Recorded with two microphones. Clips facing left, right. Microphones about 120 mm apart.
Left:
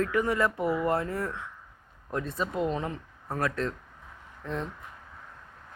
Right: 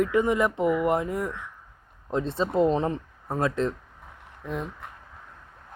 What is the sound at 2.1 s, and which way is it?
Speech, 25° right (ahead or behind).